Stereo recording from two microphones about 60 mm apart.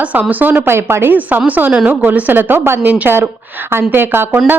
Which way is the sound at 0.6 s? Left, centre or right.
Right.